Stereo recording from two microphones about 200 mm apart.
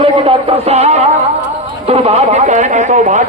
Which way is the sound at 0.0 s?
30° right (ahead or behind).